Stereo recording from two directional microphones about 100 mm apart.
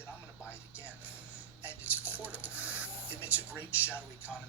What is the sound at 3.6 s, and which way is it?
Speech, 20° left (ahead or behind).